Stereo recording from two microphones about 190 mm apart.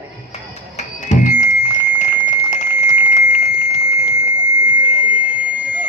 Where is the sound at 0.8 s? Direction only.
40° left (ahead or behind).